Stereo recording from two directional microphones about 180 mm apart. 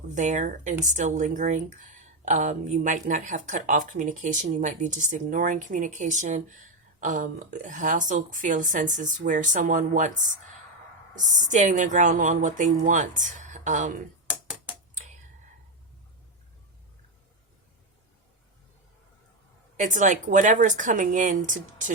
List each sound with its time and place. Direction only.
0.1 s speech: 40° right (ahead or behind)
11.1 s speech: 45° right (ahead or behind)
19.7 s speech: 45° right (ahead or behind)